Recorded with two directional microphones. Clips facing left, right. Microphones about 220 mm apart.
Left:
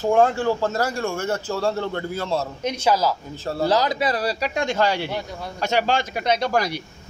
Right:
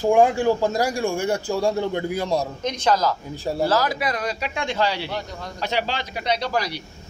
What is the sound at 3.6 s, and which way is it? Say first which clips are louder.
A man's voice: left 2 dB; 20° left (ahead or behind).